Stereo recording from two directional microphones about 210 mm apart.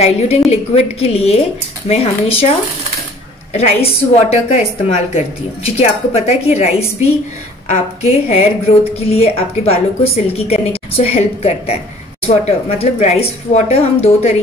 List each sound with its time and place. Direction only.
0.0 s a woman's voice: 30° left (ahead or behind)
3.5 s a woman's voice: 30° left (ahead or behind)